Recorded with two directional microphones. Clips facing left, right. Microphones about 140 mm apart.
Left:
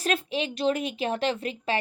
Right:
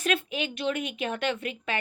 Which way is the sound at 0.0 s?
35° left (ahead or behind).